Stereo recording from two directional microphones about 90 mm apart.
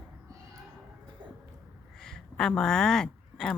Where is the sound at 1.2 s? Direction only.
60° right (ahead or behind).